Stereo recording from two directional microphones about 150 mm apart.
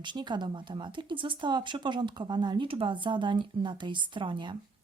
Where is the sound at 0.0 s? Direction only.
30° right (ahead or behind).